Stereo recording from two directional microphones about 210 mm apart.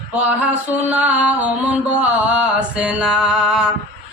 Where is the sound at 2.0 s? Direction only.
5° right (ahead or behind).